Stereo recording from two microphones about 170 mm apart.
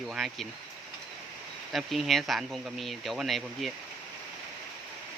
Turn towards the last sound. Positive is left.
turn(degrees=0)  # may be behind; listen again after turning